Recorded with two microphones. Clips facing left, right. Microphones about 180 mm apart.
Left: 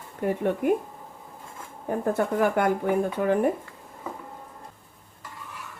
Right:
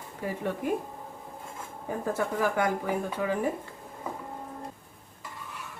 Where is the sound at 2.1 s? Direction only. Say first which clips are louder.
Left 4 dB; 55° left (ahead or behind).